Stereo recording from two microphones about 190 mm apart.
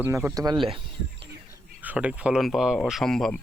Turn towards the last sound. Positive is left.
turn(degrees=0)  # may be behind; listen again after turning